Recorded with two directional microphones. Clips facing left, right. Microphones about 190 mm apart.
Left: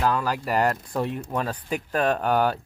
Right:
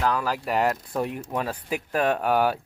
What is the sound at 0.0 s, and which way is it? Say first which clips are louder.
Speech: left 1 dB; centre (ahead or behind).